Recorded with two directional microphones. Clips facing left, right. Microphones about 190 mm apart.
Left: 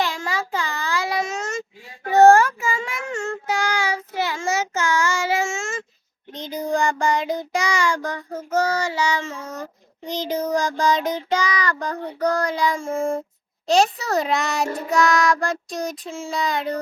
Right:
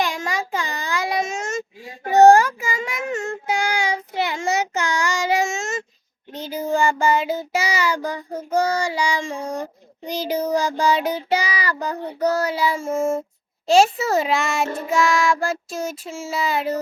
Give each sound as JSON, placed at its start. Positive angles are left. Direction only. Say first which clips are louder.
{"t": 0.0, "sound": "child singing", "louder": "right 1 dB", "side_deg": -15}
{"t": 6.3, "sound": "child singing", "louder": "right 1 dB", "side_deg": -5}
{"t": 9.3, "sound": "a sound", "louder": "right 6 dB", "side_deg": -30}
{"t": 9.6, "sound": "child singing", "louder": "right 4 dB", "side_deg": -10}